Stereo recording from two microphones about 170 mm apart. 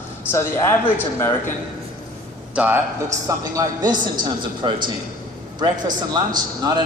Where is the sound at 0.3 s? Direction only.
15° left (ahead or behind).